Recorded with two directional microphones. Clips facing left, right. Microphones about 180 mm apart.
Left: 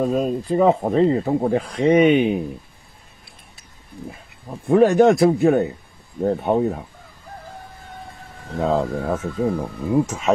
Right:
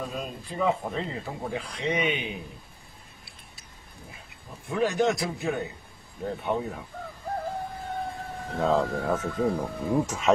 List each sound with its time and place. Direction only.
0.0 s speech: 45° left (ahead or behind)
4.5 s speech: 55° left (ahead or behind)
8.6 s speech: 20° left (ahead or behind)
9.1 s speech: 10° left (ahead or behind)